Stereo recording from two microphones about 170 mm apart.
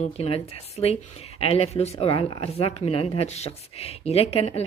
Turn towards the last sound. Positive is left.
turn(degrees=35)  # may be behind; listen again after turning